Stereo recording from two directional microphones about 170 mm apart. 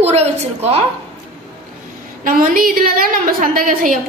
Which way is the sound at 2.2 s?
55° right (ahead or behind).